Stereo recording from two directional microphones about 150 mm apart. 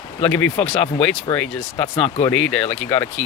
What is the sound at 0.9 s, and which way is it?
Speech, 35° left (ahead or behind).